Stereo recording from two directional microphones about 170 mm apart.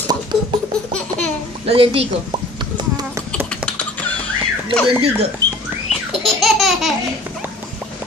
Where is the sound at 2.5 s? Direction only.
25° right (ahead or behind).